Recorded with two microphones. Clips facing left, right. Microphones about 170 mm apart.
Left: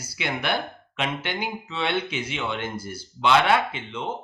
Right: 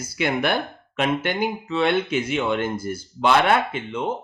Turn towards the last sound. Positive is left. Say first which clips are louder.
# right 2 dB
turn(degrees=-50)  # may be behind; listen again after turning